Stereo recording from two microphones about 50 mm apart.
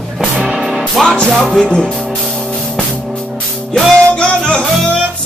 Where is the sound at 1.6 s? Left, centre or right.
Centre.